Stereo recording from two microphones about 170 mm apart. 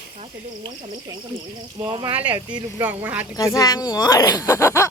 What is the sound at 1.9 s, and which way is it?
Speech, 30° right (ahead or behind).